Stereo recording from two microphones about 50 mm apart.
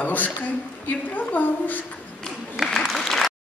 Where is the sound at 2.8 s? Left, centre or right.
Centre.